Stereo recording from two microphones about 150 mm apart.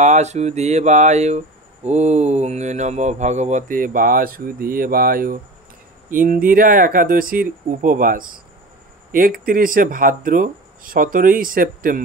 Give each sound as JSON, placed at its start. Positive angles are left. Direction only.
{"t": 0.0, "sound": "speech", "side_deg": -50}